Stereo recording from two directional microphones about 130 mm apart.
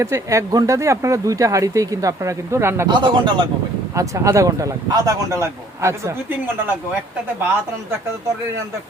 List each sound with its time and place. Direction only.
0.0 s speech: 25° right (ahead or behind)
2.8 s speech: 35° right (ahead or behind)
3.9 s speech: 25° right (ahead or behind)